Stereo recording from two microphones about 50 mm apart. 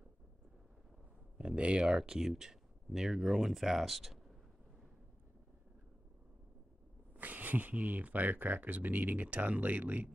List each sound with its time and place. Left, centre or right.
1.4 s speech: right; by 4.2 s centre
7.2 s speech: right